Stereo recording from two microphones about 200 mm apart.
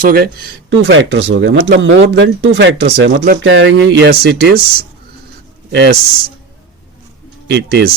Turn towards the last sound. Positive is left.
turn(degrees=-55)  # may be behind; listen again after turning